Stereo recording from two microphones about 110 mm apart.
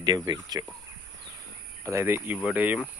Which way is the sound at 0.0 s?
35° right (ahead or behind).